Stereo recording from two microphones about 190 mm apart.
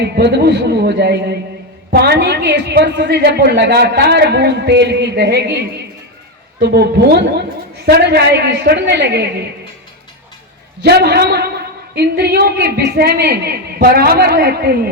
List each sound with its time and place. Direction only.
0.0 s a woman's voice: 65° right (ahead or behind)
6.6 s a woman's voice: 60° right (ahead or behind)
10.8 s a woman's voice: 55° right (ahead or behind)